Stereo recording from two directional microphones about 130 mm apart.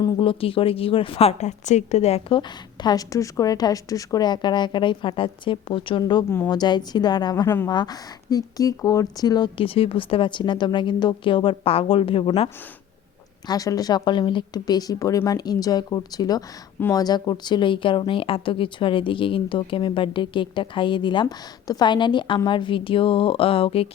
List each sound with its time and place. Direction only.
0.0 s a woman's voice: 40° left (ahead or behind)
2.8 s speech: 25° left (ahead or behind)
6.2 s a woman's voice: 15° left (ahead or behind)
6.5 s speech: 35° left (ahead or behind)
7.4 s a woman's voice: 15° left (ahead or behind)
7.7 s speech: 35° left (ahead or behind)
13.5 s a woman's voice: 30° left (ahead or behind); by 23.9 s 45° left (ahead or behind)